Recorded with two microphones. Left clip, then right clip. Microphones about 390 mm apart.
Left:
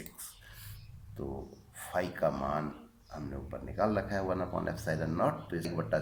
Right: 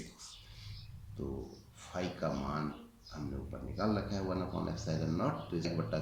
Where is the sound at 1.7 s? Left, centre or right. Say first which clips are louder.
Left 6 dB; centre.